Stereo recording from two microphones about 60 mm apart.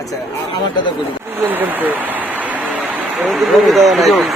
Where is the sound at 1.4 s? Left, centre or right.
Right.